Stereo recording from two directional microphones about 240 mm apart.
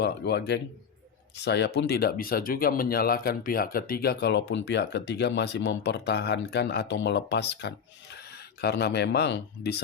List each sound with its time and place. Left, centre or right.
0.0 s speech: left